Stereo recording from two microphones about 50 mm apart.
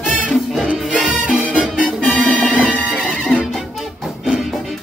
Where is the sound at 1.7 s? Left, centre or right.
Left.